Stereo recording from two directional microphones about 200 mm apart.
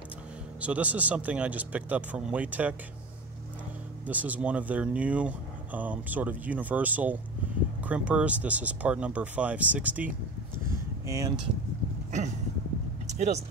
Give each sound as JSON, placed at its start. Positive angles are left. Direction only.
{"t": 0.6, "sound": "speech", "side_deg": -5}
{"t": 4.0, "sound": "speech", "side_deg": -10}
{"t": 11.1, "sound": "speech", "side_deg": -15}
{"t": 13.0, "sound": "vehicle", "side_deg": -35}